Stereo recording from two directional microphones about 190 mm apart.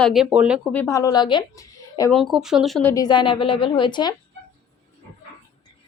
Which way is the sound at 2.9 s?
20° left (ahead or behind).